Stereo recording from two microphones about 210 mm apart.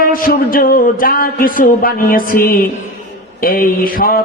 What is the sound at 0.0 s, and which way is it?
Mantra, 45° left (ahead or behind).